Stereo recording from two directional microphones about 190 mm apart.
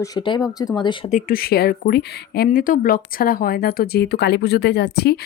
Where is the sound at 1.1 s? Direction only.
50° left (ahead or behind).